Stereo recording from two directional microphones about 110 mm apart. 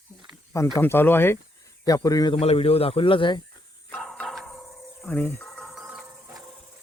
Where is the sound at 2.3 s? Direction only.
60° left (ahead or behind).